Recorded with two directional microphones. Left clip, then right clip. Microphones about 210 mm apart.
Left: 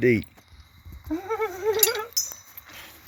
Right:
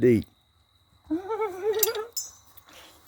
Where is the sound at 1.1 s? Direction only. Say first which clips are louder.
Left 1 dB; 20° right (ahead or behind).